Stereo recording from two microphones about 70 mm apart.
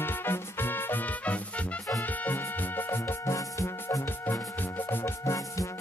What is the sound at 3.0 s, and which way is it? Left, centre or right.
Music, left.